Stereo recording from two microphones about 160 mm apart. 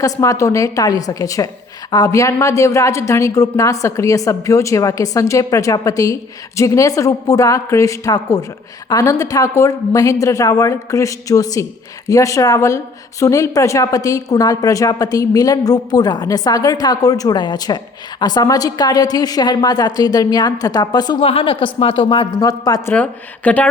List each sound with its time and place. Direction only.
0.0 s speech: 20° left (ahead or behind)
23.0 s a woman's voice: 10° left (ahead or behind)